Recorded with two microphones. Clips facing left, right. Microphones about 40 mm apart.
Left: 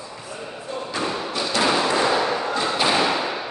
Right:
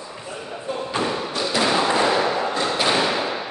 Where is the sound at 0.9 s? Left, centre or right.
Right.